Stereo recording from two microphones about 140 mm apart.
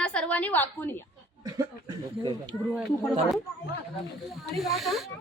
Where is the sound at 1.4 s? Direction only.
25° right (ahead or behind).